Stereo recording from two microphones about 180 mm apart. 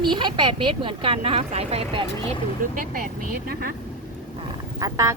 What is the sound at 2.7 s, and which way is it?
Speech, 50° right (ahead or behind).